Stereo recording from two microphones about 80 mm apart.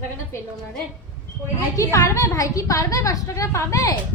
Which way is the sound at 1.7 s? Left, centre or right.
Left.